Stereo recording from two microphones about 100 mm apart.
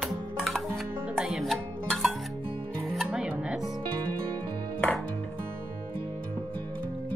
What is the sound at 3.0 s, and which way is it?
Music, 15° right (ahead or behind).